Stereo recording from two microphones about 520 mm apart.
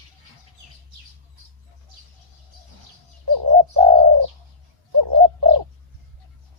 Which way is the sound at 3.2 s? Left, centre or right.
Right.